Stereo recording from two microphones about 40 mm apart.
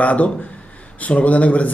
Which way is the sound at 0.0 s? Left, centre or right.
Left.